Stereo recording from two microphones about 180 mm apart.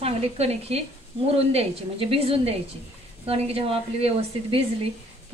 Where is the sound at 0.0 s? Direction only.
35° right (ahead or behind).